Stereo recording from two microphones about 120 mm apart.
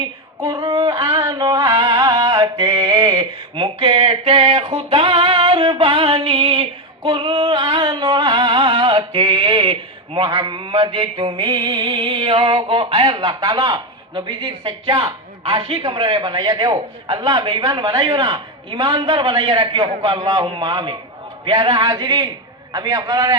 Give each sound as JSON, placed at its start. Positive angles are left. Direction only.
{"t": 0.4, "sound": "female singing", "side_deg": -30}
{"t": 1.8, "sound": "music", "side_deg": -35}
{"t": 3.2, "sound": "a sound", "side_deg": -45}
{"t": 10.2, "sound": "a man's voice", "side_deg": -40}
{"t": 10.8, "sound": "music", "side_deg": -45}
{"t": 18.7, "sound": "a man's voice", "side_deg": -45}
{"t": 21.4, "sound": "music", "side_deg": -45}